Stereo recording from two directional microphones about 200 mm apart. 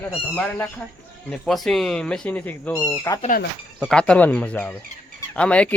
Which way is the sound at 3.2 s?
45° left (ahead or behind).